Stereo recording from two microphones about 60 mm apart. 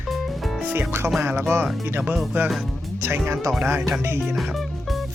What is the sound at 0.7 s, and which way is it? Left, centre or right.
Speech, right.